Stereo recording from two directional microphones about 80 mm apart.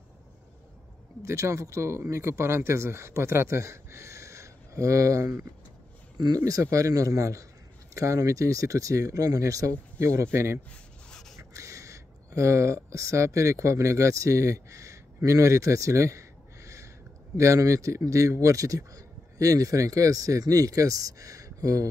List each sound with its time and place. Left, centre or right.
1.2 s speech: right
6.1 s speech: right
6.4 s speech: right
11.1 s a sound: centre
11.3 s speech: right
15.2 s a sound: right
17.4 s speech: right